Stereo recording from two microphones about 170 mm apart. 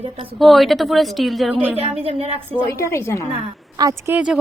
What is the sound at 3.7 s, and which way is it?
Speech, 20° right (ahead or behind).